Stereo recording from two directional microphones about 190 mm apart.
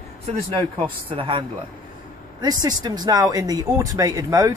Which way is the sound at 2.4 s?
20° right (ahead or behind).